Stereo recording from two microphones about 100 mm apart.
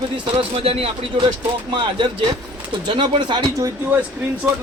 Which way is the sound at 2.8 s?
55° right (ahead or behind).